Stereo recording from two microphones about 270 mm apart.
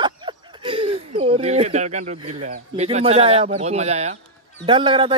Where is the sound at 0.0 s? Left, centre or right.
Centre.